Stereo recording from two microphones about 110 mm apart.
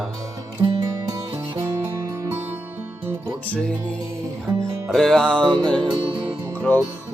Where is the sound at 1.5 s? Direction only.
25° right (ahead or behind).